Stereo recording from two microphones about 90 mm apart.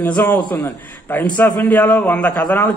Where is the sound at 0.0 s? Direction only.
20° left (ahead or behind).